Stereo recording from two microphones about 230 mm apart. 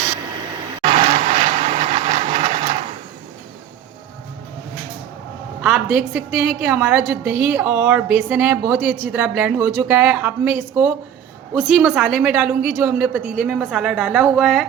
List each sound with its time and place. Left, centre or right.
0.8 s vehicle: right
5.6 s a woman's voice: centre